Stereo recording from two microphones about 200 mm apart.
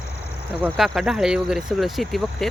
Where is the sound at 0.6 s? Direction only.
Centre (ahead or behind).